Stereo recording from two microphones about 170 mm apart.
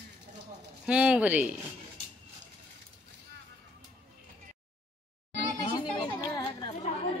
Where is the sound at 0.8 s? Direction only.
5° right (ahead or behind).